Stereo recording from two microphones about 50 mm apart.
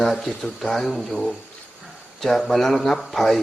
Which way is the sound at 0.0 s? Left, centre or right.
Centre.